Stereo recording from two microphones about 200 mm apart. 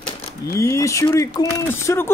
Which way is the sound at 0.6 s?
15° left (ahead or behind).